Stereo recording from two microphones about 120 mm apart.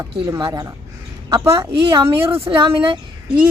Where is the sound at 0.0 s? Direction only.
30° right (ahead or behind).